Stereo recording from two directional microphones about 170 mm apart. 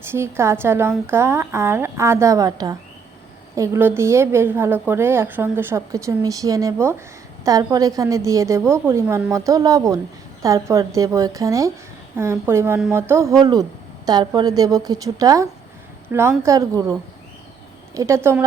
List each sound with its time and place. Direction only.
0.0 s a woman's voice: 15° right (ahead or behind)